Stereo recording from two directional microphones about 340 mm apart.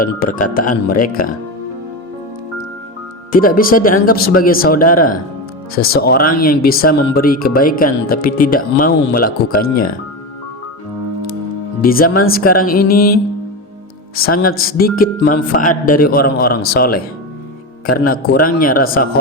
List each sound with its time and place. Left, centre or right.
0.0 s speech: left
3.3 s speech: left
11.8 s speech: left
14.3 s speech: left
18.0 s speech: left